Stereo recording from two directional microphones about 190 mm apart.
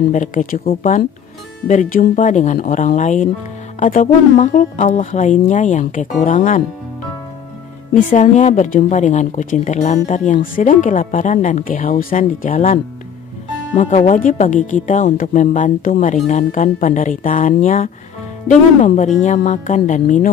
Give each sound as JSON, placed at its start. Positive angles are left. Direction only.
{"t": 0.1, "sound": "a woman's voice", "side_deg": 40}
{"t": 7.9, "sound": "a woman's voice", "side_deg": 40}